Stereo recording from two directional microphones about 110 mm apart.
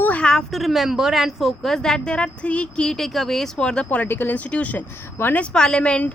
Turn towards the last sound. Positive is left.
turn(degrees=10)  # may be behind; listen again after turning